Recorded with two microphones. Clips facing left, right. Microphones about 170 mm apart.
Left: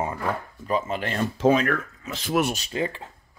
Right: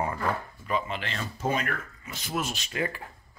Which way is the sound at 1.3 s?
80° left.